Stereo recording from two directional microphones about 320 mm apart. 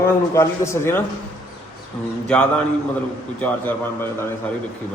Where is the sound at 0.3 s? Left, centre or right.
Centre.